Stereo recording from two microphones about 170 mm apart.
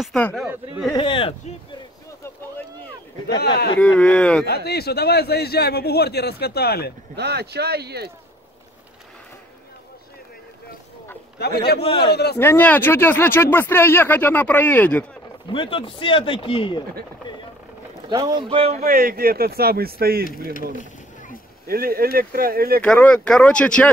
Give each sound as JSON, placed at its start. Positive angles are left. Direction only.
{"t": 0.0, "sound": "speech", "side_deg": 5}
{"t": 0.9, "sound": "speech", "side_deg": 30}
{"t": 3.3, "sound": "a man's voice", "side_deg": 75}
{"t": 3.8, "sound": "speech", "side_deg": 5}
{"t": 4.6, "sound": "a man's voice", "side_deg": 70}
{"t": 7.2, "sound": "speech", "side_deg": -75}
{"t": 11.3, "sound": "a man's voice", "side_deg": 75}
{"t": 12.4, "sound": "speech", "side_deg": 10}
{"t": 15.5, "sound": "speech", "side_deg": 30}
{"t": 18.1, "sound": "speech", "side_deg": -25}
{"t": 18.9, "sound": "speech", "side_deg": -60}
{"t": 21.6, "sound": "speech", "side_deg": -60}
{"t": 22.8, "sound": "speech", "side_deg": 10}